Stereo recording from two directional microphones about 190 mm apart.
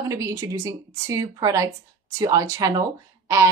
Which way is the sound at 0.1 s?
15° right (ahead or behind).